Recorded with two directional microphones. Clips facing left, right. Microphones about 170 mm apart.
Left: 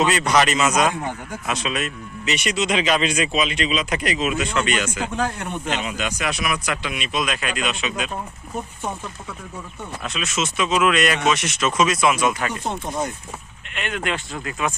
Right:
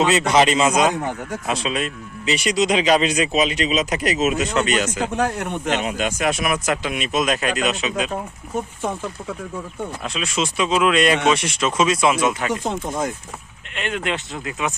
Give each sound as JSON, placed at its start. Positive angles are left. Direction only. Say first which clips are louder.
{"t": 0.0, "sound": "speech", "louder": "right 2 dB", "side_deg": -25}
{"t": 5.1, "sound": "speech", "louder": "right 3 dB", "side_deg": -65}
{"t": 5.7, "sound": "speech", "louder": "right 5 dB", "side_deg": -45}
{"t": 8.8, "sound": "speech", "louder": "right 3 dB", "side_deg": -90}
{"t": 10.0, "sound": "speech", "louder": "right 1 dB", "side_deg": -30}
{"t": 12.5, "sound": "speech", "louder": "right 3 dB", "side_deg": -90}
{"t": 13.7, "sound": "speech", "louder": "right 1 dB", "side_deg": -30}